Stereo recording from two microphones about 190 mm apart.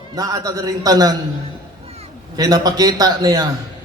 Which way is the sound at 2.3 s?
20° right (ahead or behind).